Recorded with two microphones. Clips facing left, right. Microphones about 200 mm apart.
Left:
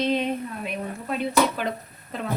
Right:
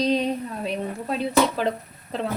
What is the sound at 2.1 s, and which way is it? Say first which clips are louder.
Speech: right 4 dB; 10° right (ahead or behind).